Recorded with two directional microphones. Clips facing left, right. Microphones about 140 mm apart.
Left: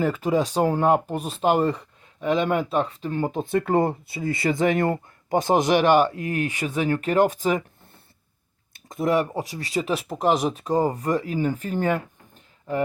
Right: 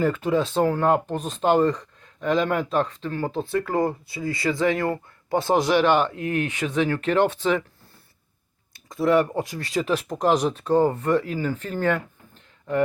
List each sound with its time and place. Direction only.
0.3 s speech: 15° left (ahead or behind)
5.9 s speech: 40° left (ahead or behind)
6.5 s speech: 10° left (ahead or behind)
8.9 s speech: 20° left (ahead or behind)
9.3 s speech: 10° left (ahead or behind)